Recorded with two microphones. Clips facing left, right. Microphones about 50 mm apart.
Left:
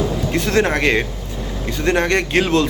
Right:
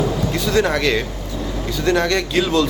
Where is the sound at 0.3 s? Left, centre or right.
Left.